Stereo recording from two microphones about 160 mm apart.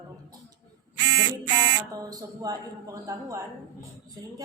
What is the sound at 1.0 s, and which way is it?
Speech, 30° right (ahead or behind).